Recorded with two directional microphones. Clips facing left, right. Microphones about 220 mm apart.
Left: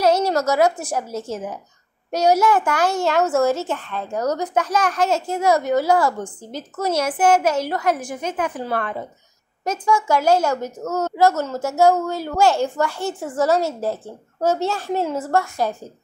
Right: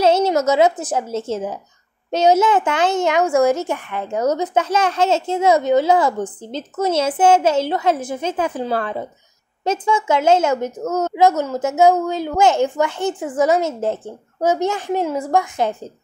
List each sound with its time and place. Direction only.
0.0 s a woman's voice: 25° right (ahead or behind)